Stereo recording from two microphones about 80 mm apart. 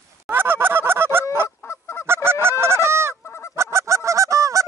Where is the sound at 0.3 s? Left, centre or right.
Right.